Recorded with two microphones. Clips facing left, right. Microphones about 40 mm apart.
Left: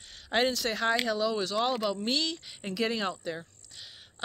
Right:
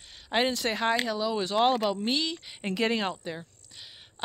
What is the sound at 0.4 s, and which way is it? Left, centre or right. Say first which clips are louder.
Speech: right 1 dB; right.